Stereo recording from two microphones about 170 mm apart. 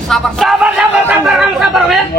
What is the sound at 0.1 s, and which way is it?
Speech, centre (ahead or behind).